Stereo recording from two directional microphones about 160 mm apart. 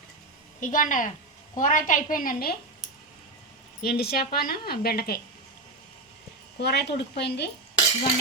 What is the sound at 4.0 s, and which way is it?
Speech, 75° left (ahead or behind).